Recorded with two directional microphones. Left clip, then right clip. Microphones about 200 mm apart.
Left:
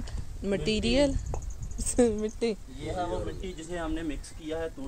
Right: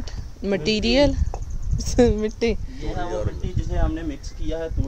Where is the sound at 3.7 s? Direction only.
45° left (ahead or behind).